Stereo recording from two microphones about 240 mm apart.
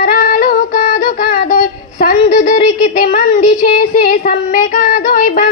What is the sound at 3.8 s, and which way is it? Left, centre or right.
Child singing, left.